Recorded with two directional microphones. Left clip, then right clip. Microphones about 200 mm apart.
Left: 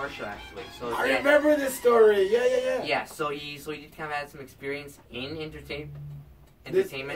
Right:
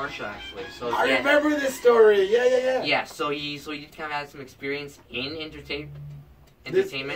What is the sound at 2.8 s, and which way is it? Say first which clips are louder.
Speech: right 3 dB; 10° left (ahead or behind).